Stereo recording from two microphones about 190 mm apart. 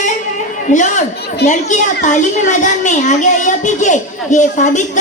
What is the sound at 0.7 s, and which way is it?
A woman's voice, 40° left (ahead or behind).